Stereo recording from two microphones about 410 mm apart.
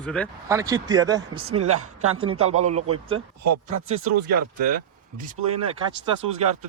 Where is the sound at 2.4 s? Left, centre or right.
Centre.